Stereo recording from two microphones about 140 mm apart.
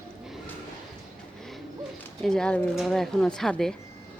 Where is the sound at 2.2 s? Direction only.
5° left (ahead or behind).